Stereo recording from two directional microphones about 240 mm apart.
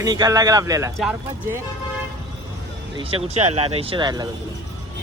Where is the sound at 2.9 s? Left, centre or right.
Right.